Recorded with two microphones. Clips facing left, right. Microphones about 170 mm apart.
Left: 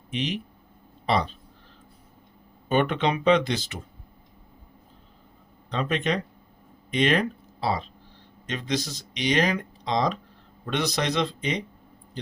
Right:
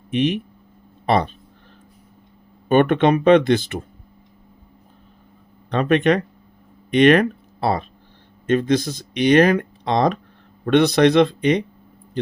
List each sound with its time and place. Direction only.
0.1 s speech: 55° right (ahead or behind)
2.6 s speech: 55° right (ahead or behind)
5.7 s speech: 60° right (ahead or behind)